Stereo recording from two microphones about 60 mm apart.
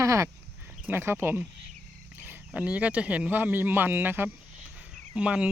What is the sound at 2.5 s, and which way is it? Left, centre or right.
Speech, right.